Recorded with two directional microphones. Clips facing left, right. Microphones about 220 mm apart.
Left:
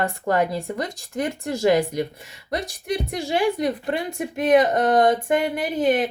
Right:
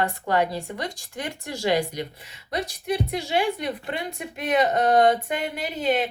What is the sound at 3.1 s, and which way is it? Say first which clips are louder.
A woman's voice: left 3 dB; 45° left (ahead or behind).